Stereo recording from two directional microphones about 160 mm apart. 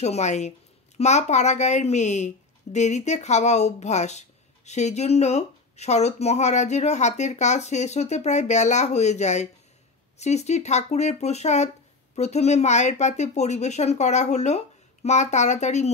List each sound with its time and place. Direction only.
0.0 s speech: 45° left (ahead or behind)